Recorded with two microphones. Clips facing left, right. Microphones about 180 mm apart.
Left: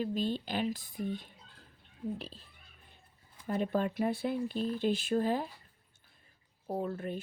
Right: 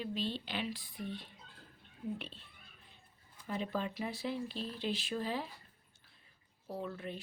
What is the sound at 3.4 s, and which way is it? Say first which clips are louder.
Speech: left 6 dB; 50° left (ahead or behind).